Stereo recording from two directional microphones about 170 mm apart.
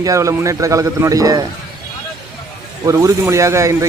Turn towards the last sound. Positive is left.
turn(degrees=-15)  # may be behind; listen again after turning